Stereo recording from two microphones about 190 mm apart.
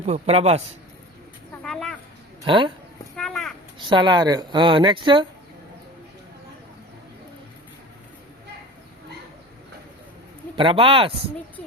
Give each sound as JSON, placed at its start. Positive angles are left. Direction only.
{"t": 0.0, "sound": "a man's voice", "side_deg": -35}
{"t": 1.6, "sound": "a sound", "side_deg": 0}
{"t": 2.4, "sound": "speech", "side_deg": -25}
{"t": 3.2, "sound": "a sound", "side_deg": 0}
{"t": 3.8, "sound": "speech", "side_deg": -25}
{"t": 10.5, "sound": "speech", "side_deg": -25}